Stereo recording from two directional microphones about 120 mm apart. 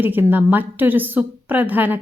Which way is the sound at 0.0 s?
15° right (ahead or behind).